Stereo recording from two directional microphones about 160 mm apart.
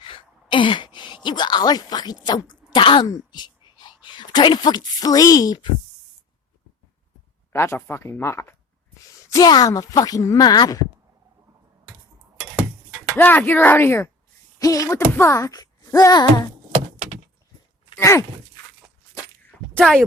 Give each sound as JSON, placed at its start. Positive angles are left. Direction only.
{"t": 0.0, "sound": "speech", "side_deg": 30}
{"t": 7.5, "sound": "speech", "side_deg": 15}
{"t": 13.1, "sound": "speech", "side_deg": 10}
{"t": 17.9, "sound": "speech", "side_deg": 20}
{"t": 19.7, "sound": "speech", "side_deg": 0}